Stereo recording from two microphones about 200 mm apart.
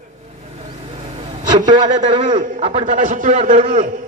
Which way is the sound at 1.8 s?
40° right (ahead or behind).